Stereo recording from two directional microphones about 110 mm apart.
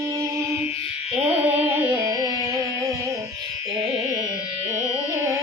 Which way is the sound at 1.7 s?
20° right (ahead or behind).